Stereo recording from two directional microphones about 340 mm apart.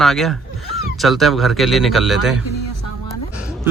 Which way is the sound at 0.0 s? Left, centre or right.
Centre.